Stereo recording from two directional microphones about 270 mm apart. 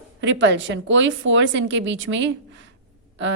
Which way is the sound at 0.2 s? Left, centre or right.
Right.